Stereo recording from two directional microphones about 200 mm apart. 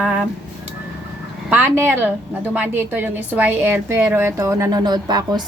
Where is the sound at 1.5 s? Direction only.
10° right (ahead or behind).